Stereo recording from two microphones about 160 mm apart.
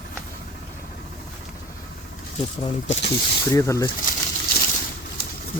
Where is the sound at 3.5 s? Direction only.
20° left (ahead or behind).